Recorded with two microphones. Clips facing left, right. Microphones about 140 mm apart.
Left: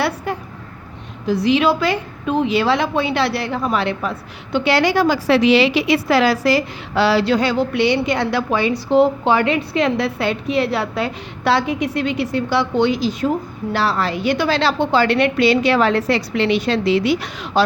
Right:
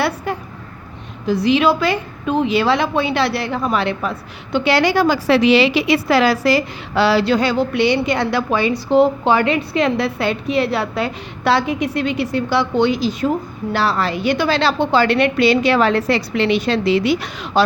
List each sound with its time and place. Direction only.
1.3 s a woman's voice: 70° right (ahead or behind)
4.5 s a woman's voice: 90° right; by 17.6 s 60° right (ahead or behind)